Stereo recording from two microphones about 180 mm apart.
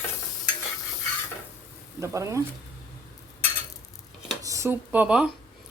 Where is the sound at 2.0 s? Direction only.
15° right (ahead or behind).